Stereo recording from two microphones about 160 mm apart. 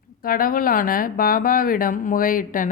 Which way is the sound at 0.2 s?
65° left (ahead or behind).